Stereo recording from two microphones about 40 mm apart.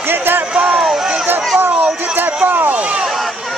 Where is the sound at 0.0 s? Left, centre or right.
Right.